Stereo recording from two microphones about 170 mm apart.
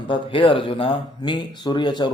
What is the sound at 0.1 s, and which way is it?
A man's voice, 30° left (ahead or behind).